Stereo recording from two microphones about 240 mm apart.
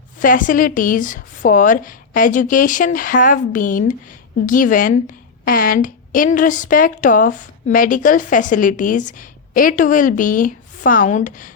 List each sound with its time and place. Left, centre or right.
0.2 s a woman's voice: left